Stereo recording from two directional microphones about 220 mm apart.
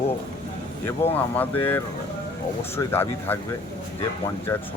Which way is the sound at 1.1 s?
10° left (ahead or behind).